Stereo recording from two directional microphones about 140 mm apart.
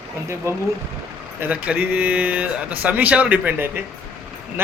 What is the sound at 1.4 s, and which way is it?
A man's voice, 10° right (ahead or behind).